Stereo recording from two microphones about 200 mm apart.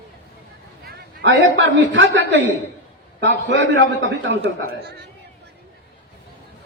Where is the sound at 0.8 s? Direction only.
60° right (ahead or behind).